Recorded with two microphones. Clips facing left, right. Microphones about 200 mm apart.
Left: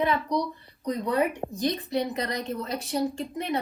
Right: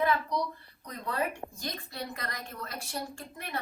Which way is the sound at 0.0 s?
20° left (ahead or behind).